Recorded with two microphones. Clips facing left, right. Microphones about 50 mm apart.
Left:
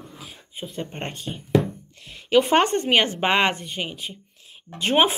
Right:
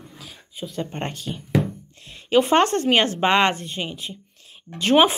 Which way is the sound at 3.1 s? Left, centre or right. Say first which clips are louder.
Right 2 dB; centre.